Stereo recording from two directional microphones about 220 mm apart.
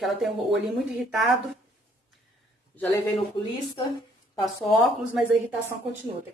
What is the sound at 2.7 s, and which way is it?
Speech, 15° left (ahead or behind).